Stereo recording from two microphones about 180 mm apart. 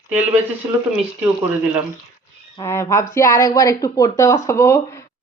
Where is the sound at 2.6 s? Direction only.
15° left (ahead or behind).